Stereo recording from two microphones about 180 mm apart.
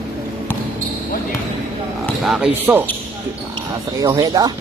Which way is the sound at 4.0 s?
20° right (ahead or behind).